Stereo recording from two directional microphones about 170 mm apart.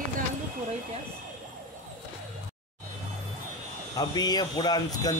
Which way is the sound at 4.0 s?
25° left (ahead or behind).